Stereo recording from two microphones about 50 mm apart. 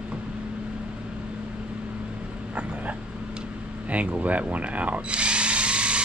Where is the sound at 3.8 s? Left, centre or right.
Right.